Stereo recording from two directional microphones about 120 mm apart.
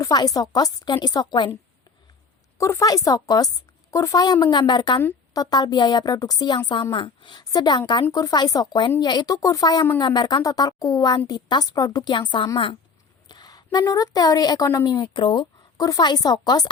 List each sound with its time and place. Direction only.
0.0 s speech: 35° left (ahead or behind)
2.6 s a woman's voice: 25° left (ahead or behind)